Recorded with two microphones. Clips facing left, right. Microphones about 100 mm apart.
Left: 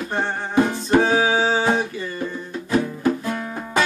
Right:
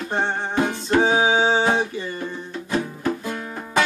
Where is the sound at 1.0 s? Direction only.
20° right (ahead or behind).